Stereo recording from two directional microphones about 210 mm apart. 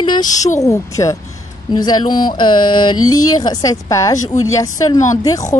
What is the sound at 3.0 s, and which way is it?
Speech, 90° left.